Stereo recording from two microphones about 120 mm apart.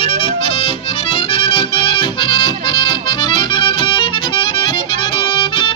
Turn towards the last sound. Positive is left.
turn(degrees=45)  # may be behind; listen again after turning